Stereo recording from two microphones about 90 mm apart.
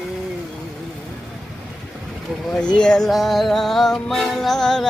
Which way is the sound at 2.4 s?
10° left (ahead or behind).